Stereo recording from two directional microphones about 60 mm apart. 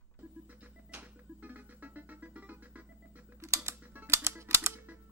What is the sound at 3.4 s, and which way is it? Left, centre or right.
Music, right.